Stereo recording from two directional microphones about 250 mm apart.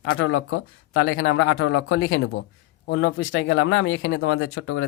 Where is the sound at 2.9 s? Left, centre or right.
Left.